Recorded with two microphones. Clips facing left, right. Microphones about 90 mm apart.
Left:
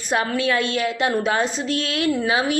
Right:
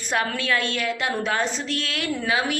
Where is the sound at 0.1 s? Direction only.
20° left (ahead or behind).